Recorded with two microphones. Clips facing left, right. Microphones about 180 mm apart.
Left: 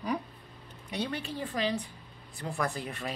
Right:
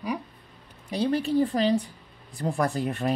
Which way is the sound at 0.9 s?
35° right (ahead or behind).